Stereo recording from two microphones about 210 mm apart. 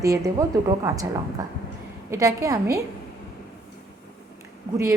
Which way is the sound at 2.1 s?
15° right (ahead or behind).